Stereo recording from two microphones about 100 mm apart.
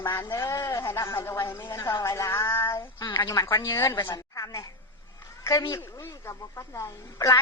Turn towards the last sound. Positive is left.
turn(degrees=35)  # may be behind; listen again after turning